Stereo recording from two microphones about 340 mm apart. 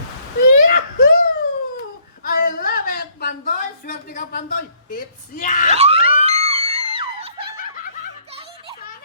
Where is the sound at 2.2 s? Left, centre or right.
Left.